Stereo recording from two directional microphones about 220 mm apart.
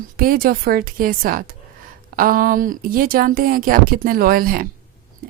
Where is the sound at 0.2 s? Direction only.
40° right (ahead or behind).